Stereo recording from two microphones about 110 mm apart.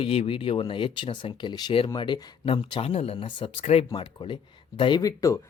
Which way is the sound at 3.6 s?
80° left.